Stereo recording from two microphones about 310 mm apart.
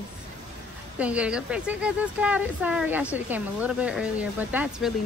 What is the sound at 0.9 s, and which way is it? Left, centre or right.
A woman's voice, centre.